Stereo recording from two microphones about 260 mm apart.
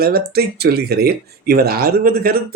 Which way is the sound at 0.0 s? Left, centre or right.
Right.